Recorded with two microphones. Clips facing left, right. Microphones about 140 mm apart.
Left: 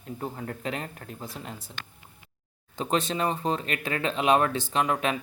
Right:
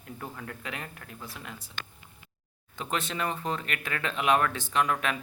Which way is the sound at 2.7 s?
35° left (ahead or behind).